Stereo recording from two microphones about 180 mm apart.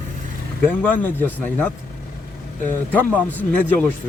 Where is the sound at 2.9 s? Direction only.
10° left (ahead or behind).